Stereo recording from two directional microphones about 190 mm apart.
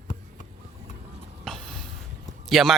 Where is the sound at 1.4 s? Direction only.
5° left (ahead or behind).